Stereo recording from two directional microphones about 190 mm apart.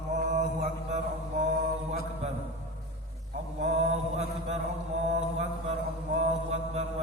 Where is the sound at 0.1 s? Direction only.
40° right (ahead or behind).